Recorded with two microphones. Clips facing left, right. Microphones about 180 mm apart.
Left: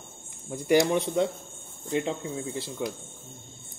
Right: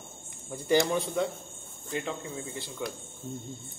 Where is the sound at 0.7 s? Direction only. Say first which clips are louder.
Left 3 dB; 20° left (ahead or behind).